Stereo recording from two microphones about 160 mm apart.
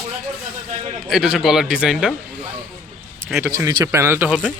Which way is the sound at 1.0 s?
5° right (ahead or behind).